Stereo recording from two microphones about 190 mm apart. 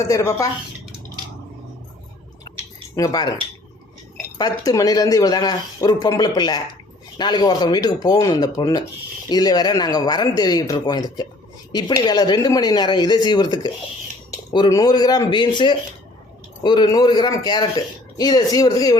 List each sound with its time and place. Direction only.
0.0 s speech: 15° left (ahead or behind)
2.9 s speech: 20° left (ahead or behind)
4.4 s a man's voice: 20° left (ahead or behind)